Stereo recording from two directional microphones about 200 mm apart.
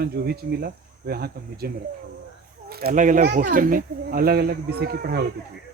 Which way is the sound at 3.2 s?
50° right (ahead or behind).